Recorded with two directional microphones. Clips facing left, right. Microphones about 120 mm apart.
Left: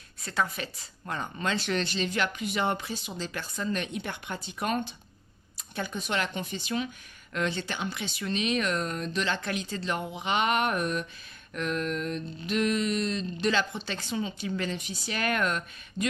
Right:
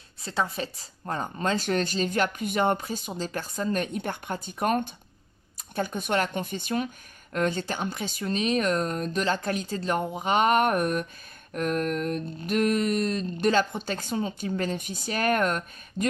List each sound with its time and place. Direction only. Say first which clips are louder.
0.2 s speech: right 2 dB; 30° right (ahead or behind); by 16.1 s 45° right (ahead or behind)